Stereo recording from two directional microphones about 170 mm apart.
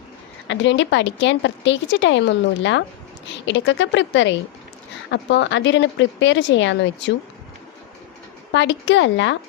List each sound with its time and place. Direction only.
0.4 s a woman's voice: 90° left
8.5 s a woman's voice: 90° left